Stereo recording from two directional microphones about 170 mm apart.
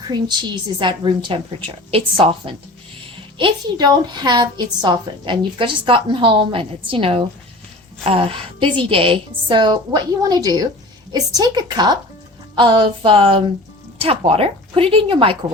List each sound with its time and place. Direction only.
0.8 s a woman's voice: 30° right (ahead or behind)